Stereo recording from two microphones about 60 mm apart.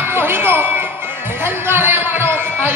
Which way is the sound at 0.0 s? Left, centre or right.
Right.